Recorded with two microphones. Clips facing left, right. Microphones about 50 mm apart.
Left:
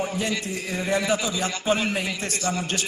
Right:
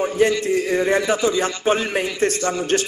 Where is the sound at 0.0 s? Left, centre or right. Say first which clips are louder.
Right 9 dB; right.